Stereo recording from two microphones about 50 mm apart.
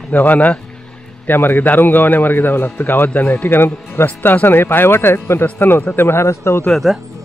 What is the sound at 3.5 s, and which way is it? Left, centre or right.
Speech, left.